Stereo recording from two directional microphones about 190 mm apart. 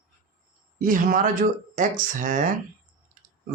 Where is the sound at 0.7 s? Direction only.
45° right (ahead or behind).